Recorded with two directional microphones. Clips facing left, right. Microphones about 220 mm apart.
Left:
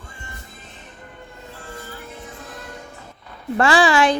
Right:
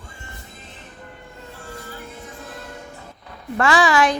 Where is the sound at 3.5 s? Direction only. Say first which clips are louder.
Left 1 dB; 30° left (ahead or behind).